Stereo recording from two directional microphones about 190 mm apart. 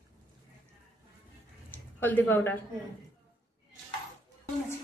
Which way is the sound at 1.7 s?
10° left (ahead or behind).